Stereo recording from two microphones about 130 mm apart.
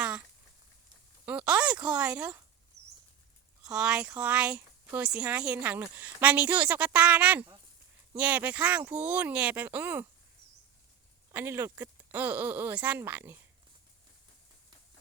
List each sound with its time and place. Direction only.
1.2 s speech: 10° right (ahead or behind)
3.6 s a woman's voice: 5° right (ahead or behind)
11.3 s a woman's voice: 20° right (ahead or behind)